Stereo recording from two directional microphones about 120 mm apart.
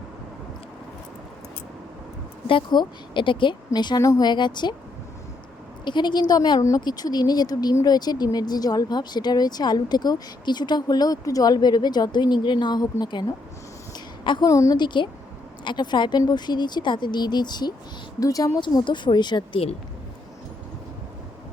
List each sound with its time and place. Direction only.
2.5 s a woman's voice: 40° left (ahead or behind)
5.8 s a woman's voice: 40° left (ahead or behind)
13.9 s a sound: 35° left (ahead or behind)
14.5 s a woman's voice: 25° left (ahead or behind)
14.8 s a woman's voice: 40° left (ahead or behind)